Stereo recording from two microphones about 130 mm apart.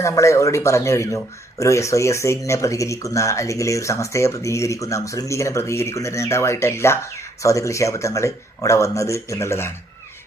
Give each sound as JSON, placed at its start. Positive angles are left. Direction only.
{"t": 0.0, "sound": "speech", "side_deg": 20}